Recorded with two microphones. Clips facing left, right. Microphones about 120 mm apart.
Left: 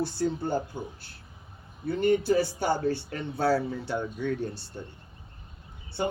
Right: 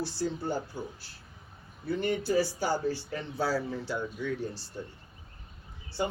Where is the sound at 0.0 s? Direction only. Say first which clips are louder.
Left 4 dB; 55° left (ahead or behind).